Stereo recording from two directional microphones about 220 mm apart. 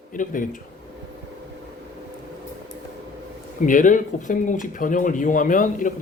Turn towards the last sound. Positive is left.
turn(degrees=35)  # may be behind; listen again after turning